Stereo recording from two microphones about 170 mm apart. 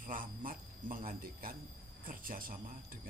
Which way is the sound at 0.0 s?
55° right (ahead or behind).